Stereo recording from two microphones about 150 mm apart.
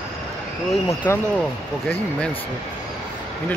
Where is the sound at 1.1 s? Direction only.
15° left (ahead or behind).